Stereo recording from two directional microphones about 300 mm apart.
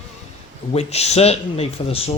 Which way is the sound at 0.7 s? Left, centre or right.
Left.